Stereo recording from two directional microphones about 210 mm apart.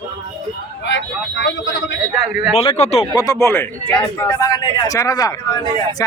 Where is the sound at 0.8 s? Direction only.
60° left (ahead or behind).